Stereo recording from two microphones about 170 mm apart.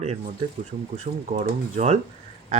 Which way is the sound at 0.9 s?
45° right (ahead or behind).